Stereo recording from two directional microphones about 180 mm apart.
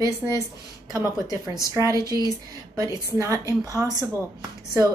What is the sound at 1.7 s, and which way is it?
A woman's voice, 15° right (ahead or behind).